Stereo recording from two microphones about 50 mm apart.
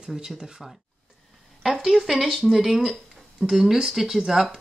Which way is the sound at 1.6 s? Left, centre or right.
Centre.